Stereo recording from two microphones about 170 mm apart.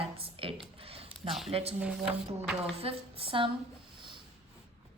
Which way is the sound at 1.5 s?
35° right (ahead or behind).